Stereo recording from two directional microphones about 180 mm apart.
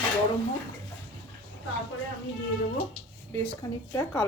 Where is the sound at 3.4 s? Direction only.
20° left (ahead or behind).